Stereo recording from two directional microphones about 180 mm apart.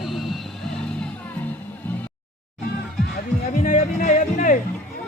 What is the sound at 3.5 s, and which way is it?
Music, 45° left (ahead or behind).